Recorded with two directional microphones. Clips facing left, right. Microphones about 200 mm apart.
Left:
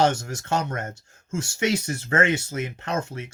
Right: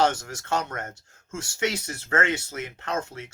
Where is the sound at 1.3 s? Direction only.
15° left (ahead or behind).